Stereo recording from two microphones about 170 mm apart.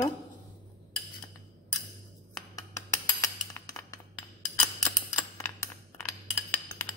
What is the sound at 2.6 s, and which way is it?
Chink, 20° left (ahead or behind).